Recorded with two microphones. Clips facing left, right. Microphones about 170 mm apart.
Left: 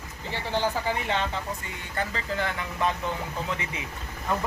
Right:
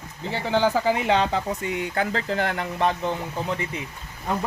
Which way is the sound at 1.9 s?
75° right (ahead or behind).